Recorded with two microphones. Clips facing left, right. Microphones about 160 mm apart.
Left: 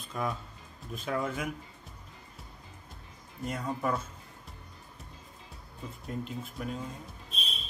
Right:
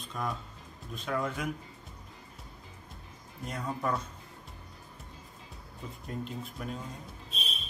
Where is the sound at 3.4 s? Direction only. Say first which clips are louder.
Left 2 dB; centre (ahead or behind).